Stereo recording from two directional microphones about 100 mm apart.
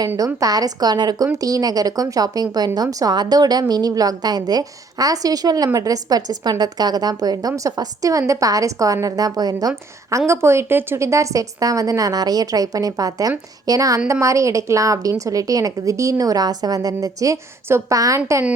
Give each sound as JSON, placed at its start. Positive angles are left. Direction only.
{"t": 0.3, "sound": "speech", "side_deg": -35}